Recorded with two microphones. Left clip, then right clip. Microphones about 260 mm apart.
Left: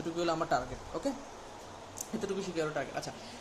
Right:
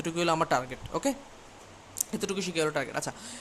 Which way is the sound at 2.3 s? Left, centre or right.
Right.